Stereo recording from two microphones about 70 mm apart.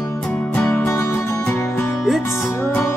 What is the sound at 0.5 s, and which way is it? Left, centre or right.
Music, centre.